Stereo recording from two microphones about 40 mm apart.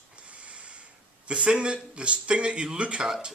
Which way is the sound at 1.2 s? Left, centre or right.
Right.